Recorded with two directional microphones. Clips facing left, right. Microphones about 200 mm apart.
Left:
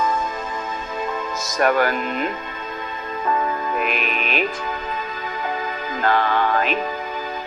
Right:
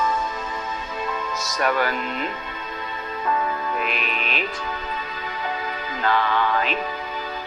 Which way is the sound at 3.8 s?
50° left (ahead or behind).